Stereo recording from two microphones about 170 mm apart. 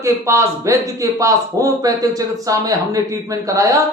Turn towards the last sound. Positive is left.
turn(degrees=-20)  # may be behind; listen again after turning